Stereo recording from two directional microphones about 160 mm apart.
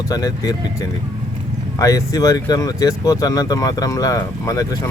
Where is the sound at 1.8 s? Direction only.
20° left (ahead or behind).